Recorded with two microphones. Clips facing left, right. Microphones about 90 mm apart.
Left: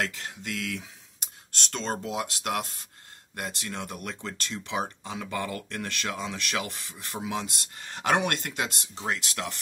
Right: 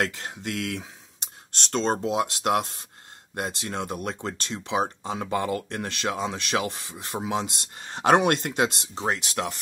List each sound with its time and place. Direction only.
0.3 s speech: 30° right (ahead or behind)
4.6 s speech: 25° right (ahead or behind)